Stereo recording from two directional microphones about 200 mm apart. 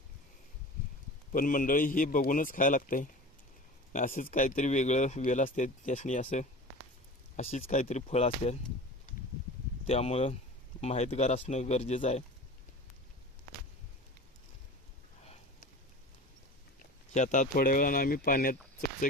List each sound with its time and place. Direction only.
1.3 s a man's voice: 45° left (ahead or behind)
9.8 s speech: 30° left (ahead or behind)
17.2 s a man's voice: 40° left (ahead or behind)